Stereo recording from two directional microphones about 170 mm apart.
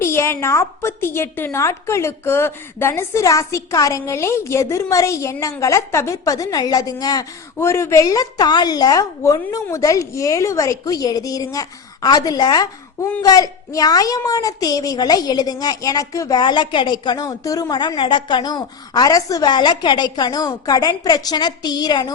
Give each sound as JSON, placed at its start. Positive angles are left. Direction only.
{"t": 0.0, "sound": "a woman's voice", "side_deg": 15}